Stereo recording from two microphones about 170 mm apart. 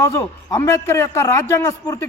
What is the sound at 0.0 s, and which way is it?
A man's voice, 15° left (ahead or behind).